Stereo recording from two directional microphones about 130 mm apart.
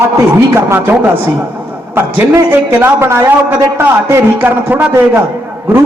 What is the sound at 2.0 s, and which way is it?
A man's voice, 15° right (ahead or behind).